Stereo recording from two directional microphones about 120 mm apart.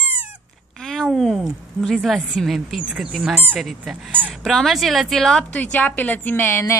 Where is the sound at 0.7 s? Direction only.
5° left (ahead or behind).